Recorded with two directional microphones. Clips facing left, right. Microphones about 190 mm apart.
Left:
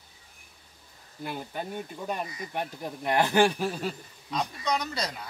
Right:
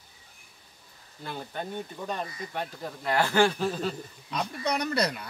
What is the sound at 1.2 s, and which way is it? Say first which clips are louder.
Speech: left 1 dB; 10° left (ahead or behind).